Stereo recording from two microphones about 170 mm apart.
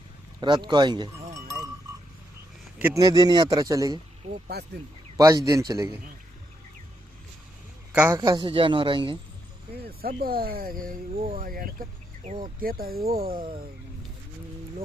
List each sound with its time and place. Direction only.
0.3 s a man's voice: 25° right (ahead or behind)
2.7 s a man's voice: 15° right (ahead or behind)
4.5 s speech: 75° right (ahead or behind)
5.1 s a man's voice: 20° right (ahead or behind)
8.1 s a man's voice: 25° right (ahead or behind)
10.0 s speech: 60° right (ahead or behind)